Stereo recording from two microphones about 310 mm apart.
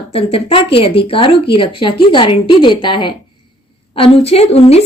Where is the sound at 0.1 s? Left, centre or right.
Centre.